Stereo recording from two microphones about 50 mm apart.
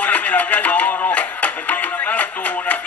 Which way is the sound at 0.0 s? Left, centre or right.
Left.